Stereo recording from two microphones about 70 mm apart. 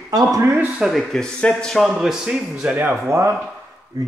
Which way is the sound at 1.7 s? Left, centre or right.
Centre.